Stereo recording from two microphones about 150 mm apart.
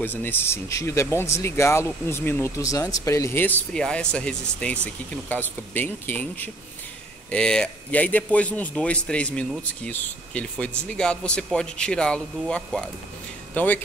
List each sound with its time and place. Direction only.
0.0 s speech: 15° left (ahead or behind)